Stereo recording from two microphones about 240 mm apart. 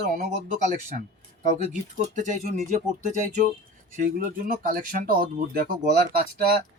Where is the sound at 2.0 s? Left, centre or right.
Right.